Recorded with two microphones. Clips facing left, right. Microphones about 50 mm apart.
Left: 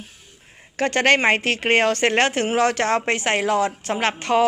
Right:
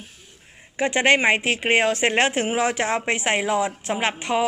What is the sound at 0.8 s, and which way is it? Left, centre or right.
A woman's voice, centre.